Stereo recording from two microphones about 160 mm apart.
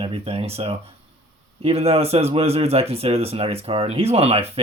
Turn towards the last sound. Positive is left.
turn(degrees=-40)  # may be behind; listen again after turning